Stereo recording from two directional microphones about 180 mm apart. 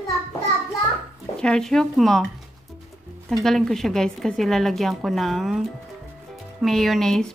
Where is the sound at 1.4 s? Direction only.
5° left (ahead or behind).